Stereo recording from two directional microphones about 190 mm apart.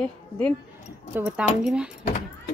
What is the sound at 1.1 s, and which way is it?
Speech, 10° right (ahead or behind).